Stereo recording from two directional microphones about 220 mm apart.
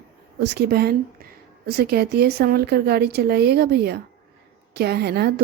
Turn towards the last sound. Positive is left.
turn(degrees=-45)  # may be behind; listen again after turning